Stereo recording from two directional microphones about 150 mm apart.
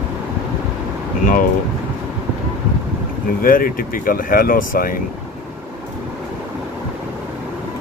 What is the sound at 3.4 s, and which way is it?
Speech, 70° left (ahead or behind).